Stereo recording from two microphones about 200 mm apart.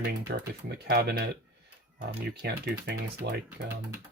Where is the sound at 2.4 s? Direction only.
55° right (ahead or behind).